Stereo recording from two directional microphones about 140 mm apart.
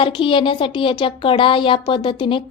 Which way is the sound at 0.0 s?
40° left (ahead or behind).